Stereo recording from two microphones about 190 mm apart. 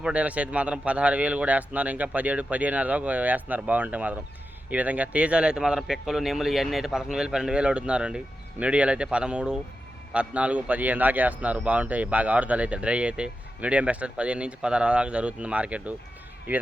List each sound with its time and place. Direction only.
0.0 s a man's voice: 5° right (ahead or behind)